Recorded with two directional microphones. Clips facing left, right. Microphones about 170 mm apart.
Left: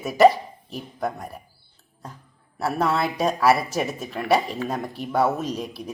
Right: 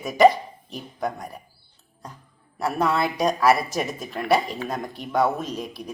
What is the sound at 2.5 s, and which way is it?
Speech, 5° left (ahead or behind).